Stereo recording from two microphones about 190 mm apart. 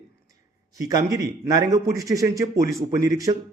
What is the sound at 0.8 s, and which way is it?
A man's voice, 20° right (ahead or behind).